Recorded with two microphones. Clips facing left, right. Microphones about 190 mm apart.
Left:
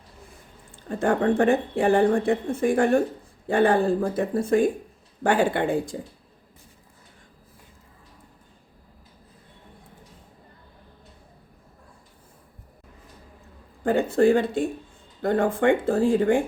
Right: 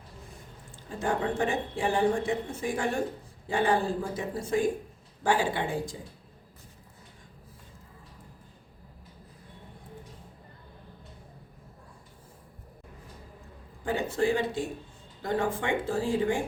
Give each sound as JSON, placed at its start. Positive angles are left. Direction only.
{"t": 0.9, "sound": "speech", "side_deg": 60}
{"t": 13.8, "sound": "speech", "side_deg": 55}